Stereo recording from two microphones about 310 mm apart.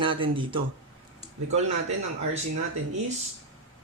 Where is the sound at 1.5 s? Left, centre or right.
Right.